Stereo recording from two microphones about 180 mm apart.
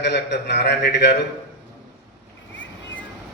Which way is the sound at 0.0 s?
70° left (ahead or behind).